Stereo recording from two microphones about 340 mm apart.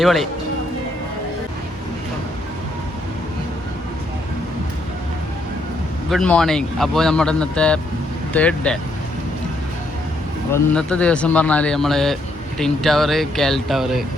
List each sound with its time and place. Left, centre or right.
0.0 s speech: centre
6.1 s speech: centre
10.5 s speech: centre